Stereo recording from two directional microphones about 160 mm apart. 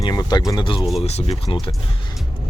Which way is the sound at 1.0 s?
40° left (ahead or behind).